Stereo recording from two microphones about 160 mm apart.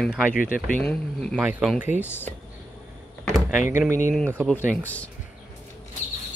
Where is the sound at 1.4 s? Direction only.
5° right (ahead or behind).